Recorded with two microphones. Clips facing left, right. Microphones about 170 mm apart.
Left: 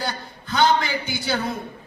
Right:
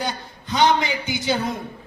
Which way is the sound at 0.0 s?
20° right (ahead or behind).